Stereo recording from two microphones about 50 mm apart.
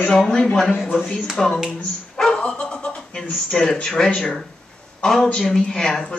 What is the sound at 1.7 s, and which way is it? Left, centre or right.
Dog, centre.